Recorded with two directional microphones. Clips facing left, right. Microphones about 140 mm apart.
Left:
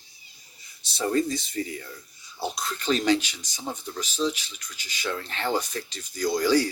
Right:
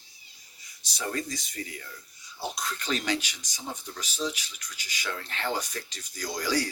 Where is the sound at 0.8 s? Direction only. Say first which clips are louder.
Left 8 dB; 30° left (ahead or behind).